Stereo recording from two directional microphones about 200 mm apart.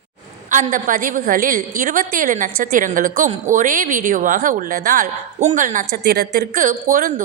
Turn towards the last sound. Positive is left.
turn(degrees=-40)  # may be behind; listen again after turning